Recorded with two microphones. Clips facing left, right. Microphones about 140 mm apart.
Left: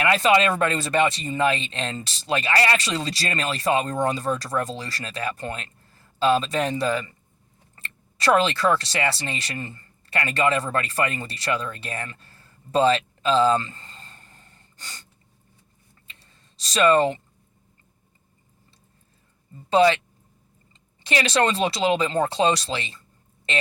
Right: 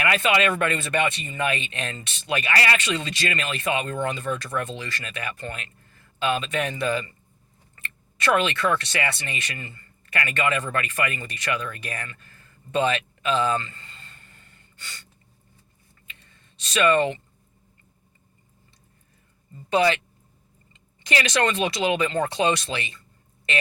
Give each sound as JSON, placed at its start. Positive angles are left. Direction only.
{"t": 0.0, "sound": "speech", "side_deg": 30}
{"t": 16.0, "sound": "a sound", "side_deg": 35}
{"t": 19.7, "sound": "speech", "side_deg": 25}
{"t": 21.0, "sound": "speech", "side_deg": 25}